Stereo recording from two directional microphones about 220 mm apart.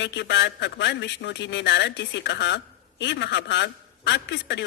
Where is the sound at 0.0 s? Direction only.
50° left (ahead or behind).